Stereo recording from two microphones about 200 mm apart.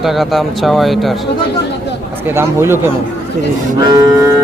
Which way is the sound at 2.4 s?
10° right (ahead or behind).